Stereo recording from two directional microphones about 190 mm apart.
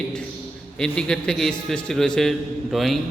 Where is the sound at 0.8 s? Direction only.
5° left (ahead or behind).